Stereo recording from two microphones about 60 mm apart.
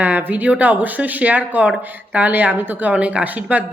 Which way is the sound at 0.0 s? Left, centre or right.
Right.